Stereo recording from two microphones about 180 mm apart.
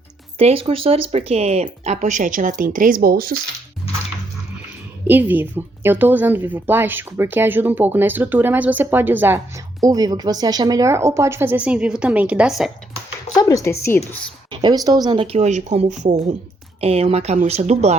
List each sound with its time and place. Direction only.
0.3 s speech: 30° right (ahead or behind); by 3.3 s 55° right (ahead or behind)
5.0 s a woman's voice: 10° right (ahead or behind)
13.3 s a woman's voice: 20° left (ahead or behind)
14.5 s speech: 25° right (ahead or behind)